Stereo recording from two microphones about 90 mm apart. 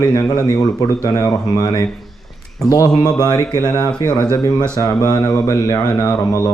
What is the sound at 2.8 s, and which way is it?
Speech, 45° left (ahead or behind).